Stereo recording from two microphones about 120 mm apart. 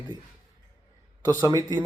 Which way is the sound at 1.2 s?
25° right (ahead or behind).